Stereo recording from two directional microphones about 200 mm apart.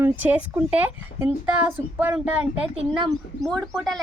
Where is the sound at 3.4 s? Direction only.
Centre (ahead or behind).